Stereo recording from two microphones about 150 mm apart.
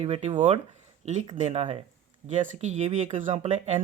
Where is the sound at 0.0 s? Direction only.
45° right (ahead or behind).